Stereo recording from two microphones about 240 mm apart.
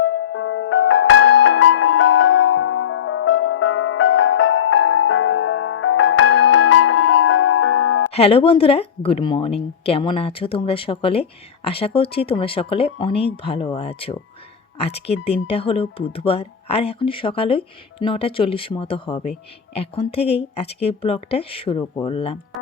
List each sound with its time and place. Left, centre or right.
0.0 s music: left
6.7 s music: left
8.1 s speech: left